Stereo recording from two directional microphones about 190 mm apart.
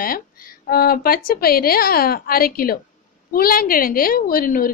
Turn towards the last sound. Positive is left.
turn(degrees=50)  # may be behind; listen again after turning